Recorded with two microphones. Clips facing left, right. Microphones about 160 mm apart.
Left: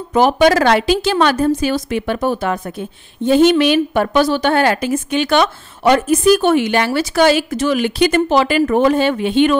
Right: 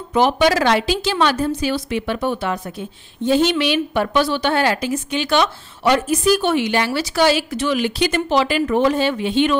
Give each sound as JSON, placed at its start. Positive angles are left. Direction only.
{"t": 0.1, "sound": "a woman's voice", "side_deg": 45}